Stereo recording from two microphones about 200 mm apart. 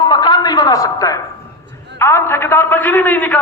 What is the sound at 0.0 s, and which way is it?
Music, 20° left (ahead or behind).